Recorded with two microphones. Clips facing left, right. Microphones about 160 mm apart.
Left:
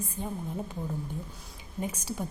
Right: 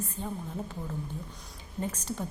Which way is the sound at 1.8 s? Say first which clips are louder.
Even; 10° left (ahead or behind).